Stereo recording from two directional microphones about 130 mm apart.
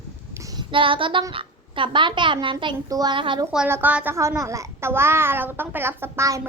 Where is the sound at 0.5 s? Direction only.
40° right (ahead or behind).